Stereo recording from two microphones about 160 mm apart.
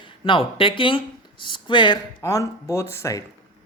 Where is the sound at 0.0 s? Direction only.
30° left (ahead or behind).